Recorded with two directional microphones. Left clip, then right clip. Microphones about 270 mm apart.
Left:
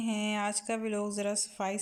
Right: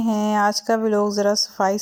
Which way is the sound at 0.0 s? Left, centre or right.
Centre.